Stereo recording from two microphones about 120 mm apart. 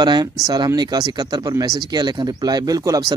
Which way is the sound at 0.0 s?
40° right (ahead or behind).